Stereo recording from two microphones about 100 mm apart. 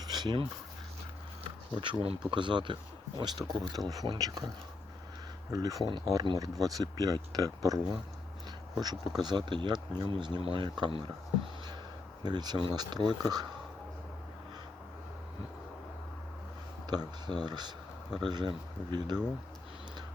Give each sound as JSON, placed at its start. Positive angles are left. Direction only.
{"t": 0.0, "sound": "a sound", "side_deg": -45}
{"t": 1.5, "sound": "speech", "side_deg": -55}
{"t": 5.5, "sound": "speech", "side_deg": -35}
{"t": 12.2, "sound": "speech", "side_deg": -45}
{"t": 16.9, "sound": "speech", "side_deg": -45}